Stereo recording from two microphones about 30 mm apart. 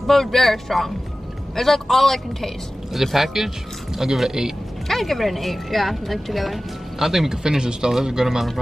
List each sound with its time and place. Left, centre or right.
0.0 s a man's voice: centre
2.9 s speech: centre
4.8 s speech: centre
7.0 s speech: centre